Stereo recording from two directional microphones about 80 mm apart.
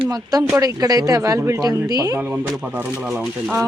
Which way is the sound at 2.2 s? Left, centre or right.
Centre.